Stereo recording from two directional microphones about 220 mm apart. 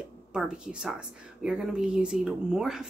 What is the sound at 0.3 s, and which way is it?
A woman's voice, 5° right (ahead or behind).